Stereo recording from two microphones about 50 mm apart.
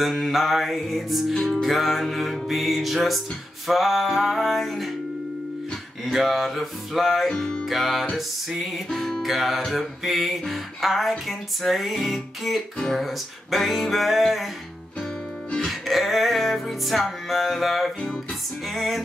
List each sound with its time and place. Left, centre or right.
0.0 s music: centre
6.1 s music: centre
7.3 s music: centre
7.7 s music: centre
15.6 s music: centre